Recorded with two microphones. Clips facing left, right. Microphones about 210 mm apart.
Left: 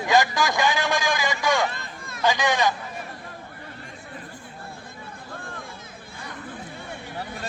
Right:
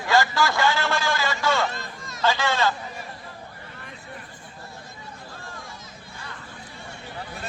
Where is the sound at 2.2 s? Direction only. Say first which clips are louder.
Left 1 dB; 15° left (ahead or behind).